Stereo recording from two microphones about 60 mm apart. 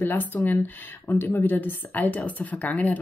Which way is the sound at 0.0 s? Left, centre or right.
Left.